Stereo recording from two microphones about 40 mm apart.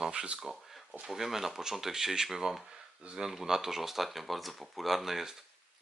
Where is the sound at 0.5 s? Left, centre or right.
Centre.